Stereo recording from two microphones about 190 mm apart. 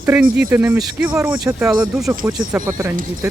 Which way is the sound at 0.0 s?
10° right (ahead or behind).